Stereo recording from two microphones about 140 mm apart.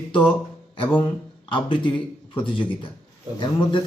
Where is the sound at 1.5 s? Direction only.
35° left (ahead or behind).